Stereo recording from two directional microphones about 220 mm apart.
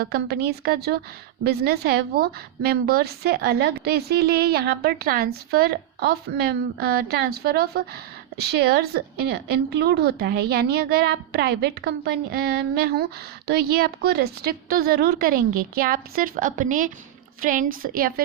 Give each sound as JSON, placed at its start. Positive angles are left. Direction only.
{"t": 0.0, "sound": "a woman's voice", "side_deg": -45}